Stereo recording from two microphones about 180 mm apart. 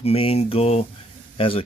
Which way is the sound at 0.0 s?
35° left (ahead or behind).